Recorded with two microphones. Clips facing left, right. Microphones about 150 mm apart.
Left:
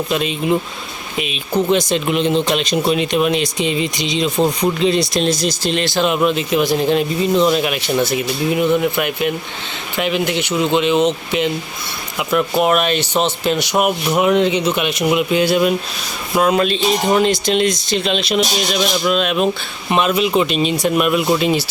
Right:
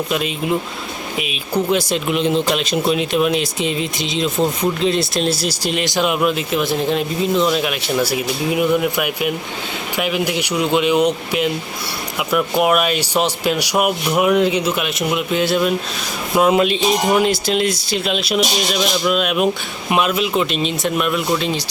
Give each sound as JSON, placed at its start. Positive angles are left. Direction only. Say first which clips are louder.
{"t": 0.1, "sound": "speech", "louder": "left 4 dB", "side_deg": -5}
{"t": 16.3, "sound": "speech", "louder": "right 1 dB", "side_deg": -20}